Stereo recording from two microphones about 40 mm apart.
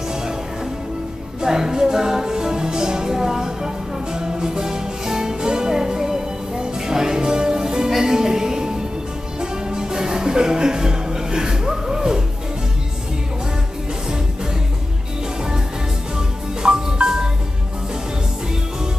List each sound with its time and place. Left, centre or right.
1.4 s music: centre
16.2 s music: centre